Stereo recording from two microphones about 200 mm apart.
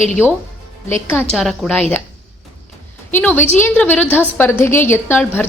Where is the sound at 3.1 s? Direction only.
10° left (ahead or behind).